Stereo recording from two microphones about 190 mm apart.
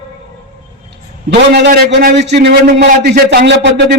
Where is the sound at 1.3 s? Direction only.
60° right (ahead or behind).